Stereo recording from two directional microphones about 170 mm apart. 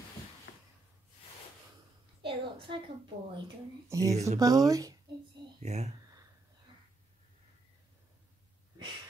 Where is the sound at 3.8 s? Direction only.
20° right (ahead or behind).